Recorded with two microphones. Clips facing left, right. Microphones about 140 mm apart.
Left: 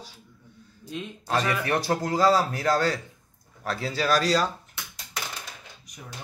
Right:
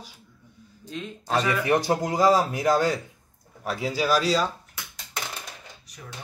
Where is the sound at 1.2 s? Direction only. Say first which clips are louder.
Right 2 dB; 15° right (ahead or behind).